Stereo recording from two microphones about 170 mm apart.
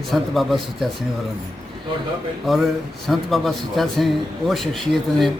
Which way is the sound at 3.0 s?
Centre (ahead or behind).